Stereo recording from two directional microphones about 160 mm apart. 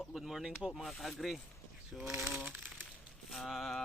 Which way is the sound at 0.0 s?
Centre (ahead or behind).